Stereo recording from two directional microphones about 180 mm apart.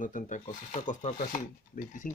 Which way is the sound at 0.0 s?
45° left (ahead or behind).